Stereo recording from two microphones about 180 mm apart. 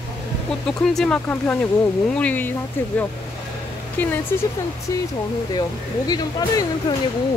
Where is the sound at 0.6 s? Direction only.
Centre (ahead or behind).